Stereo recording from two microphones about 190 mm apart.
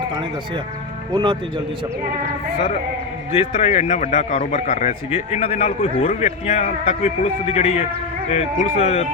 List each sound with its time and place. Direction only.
0.1 s speech: 25° right (ahead or behind)
3.3 s a man's voice: 35° left (ahead or behind)